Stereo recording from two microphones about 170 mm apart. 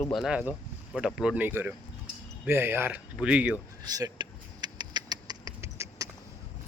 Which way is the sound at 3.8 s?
20° right (ahead or behind).